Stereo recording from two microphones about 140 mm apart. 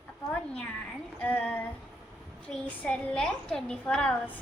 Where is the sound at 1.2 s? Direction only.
10° left (ahead or behind).